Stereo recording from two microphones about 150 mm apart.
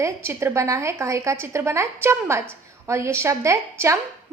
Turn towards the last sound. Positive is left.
turn(degrees=-20)  # may be behind; listen again after turning